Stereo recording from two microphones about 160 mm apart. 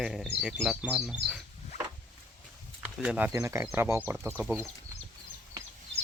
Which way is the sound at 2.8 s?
10° right (ahead or behind).